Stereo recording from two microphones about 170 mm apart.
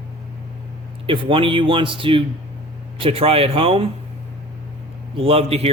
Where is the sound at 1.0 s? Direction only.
30° right (ahead or behind).